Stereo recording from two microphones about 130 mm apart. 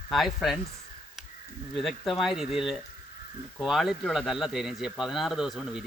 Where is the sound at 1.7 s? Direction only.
Centre (ahead or behind).